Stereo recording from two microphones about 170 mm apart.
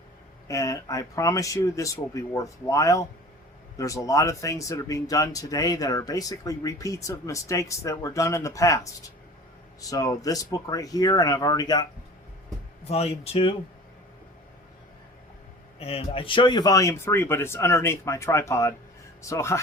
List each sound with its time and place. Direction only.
0.4 s speech: 20° left (ahead or behind)
12.8 s speech: 40° left (ahead or behind)
15.8 s speech: 35° left (ahead or behind); by 19.5 s 15° left (ahead or behind)